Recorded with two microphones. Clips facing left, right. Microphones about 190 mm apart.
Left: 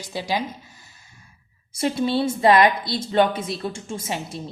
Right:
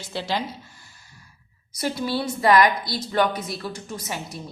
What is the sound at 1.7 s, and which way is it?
A woman's voice, 25° left (ahead or behind).